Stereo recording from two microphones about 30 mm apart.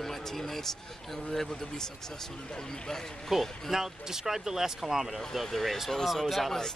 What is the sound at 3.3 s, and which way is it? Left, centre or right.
Speech, centre.